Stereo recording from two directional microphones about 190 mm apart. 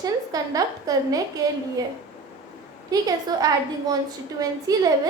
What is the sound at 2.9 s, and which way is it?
A woman's voice, 20° right (ahead or behind).